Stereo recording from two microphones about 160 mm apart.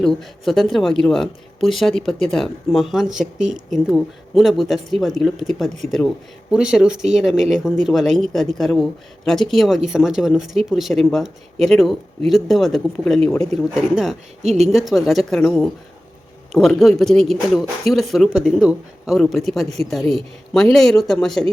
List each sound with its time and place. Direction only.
0.0 s speech: centre (ahead or behind)
14.4 s speech: 45° right (ahead or behind)
14.7 s speech: centre (ahead or behind)